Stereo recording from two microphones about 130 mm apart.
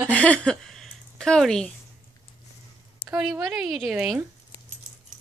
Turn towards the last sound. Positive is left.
turn(degrees=0)  # may be behind; listen again after turning